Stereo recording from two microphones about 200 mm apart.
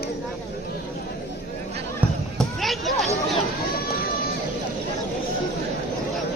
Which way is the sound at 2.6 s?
Centre (ahead or behind).